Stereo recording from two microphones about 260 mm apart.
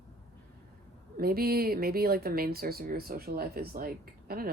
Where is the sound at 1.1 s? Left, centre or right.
Right.